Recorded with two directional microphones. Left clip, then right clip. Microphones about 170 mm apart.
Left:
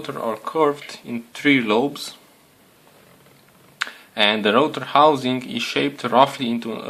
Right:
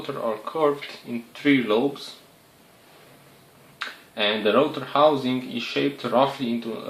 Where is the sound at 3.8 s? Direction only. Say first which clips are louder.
Left 6 dB; 30° left (ahead or behind).